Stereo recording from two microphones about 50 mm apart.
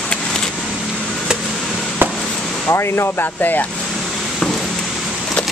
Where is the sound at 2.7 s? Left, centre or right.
Left.